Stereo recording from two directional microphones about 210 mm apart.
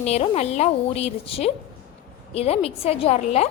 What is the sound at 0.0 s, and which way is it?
A woman's voice, 30° left (ahead or behind).